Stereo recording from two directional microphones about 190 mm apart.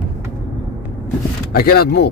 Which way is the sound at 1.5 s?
50° left (ahead or behind).